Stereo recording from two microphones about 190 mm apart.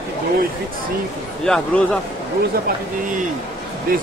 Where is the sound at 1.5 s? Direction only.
5° left (ahead or behind).